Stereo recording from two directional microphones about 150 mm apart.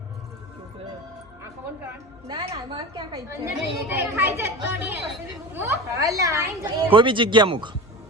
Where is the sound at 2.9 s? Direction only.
25° right (ahead or behind).